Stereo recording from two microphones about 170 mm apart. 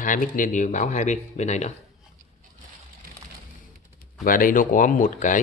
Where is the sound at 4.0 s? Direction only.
55° left (ahead or behind).